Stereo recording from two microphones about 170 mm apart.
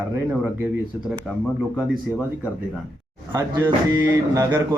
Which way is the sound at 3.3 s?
15° right (ahead or behind).